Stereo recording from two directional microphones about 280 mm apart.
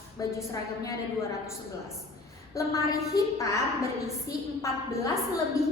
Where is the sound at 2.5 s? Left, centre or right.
Centre.